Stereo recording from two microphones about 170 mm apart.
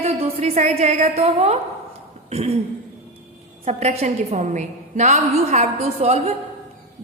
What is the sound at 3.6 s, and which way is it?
A woman's voice, 40° right (ahead or behind).